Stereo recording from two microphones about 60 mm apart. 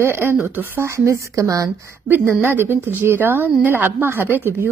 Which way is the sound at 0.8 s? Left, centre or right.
Right.